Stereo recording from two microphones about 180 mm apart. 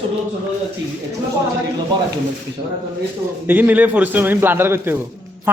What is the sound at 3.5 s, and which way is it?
A man's voice, 10° right (ahead or behind).